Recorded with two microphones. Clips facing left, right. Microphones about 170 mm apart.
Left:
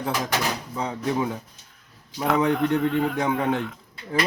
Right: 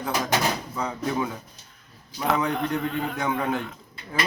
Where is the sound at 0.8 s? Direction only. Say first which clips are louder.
Left 3 dB; 25° left (ahead or behind).